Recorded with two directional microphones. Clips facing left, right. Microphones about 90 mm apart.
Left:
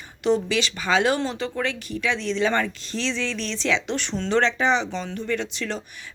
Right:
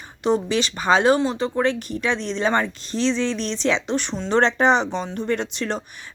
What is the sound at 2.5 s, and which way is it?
Speech, 20° right (ahead or behind).